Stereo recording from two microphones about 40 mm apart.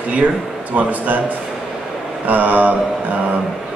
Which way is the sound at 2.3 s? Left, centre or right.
Right.